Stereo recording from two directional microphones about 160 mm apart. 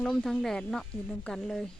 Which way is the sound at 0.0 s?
5° left (ahead or behind).